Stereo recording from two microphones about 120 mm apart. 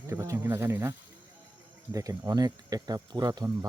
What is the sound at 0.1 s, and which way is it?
Speech, 25° right (ahead or behind).